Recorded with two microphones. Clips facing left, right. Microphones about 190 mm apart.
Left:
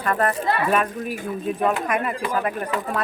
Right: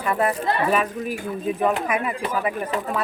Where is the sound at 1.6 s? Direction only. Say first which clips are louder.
Even; 5° right (ahead or behind).